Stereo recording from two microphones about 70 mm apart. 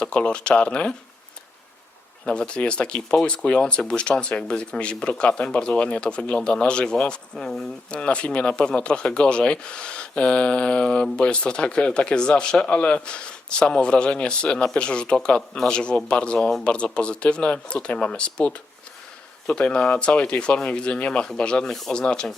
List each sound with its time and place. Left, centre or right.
0.0 s speech: centre
2.2 s speech: centre